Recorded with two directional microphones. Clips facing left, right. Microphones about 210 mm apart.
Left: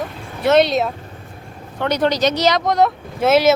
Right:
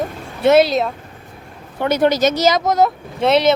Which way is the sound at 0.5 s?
Centre (ahead or behind).